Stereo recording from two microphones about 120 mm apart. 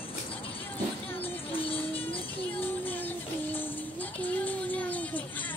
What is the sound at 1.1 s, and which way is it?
Music, 50° left (ahead or behind).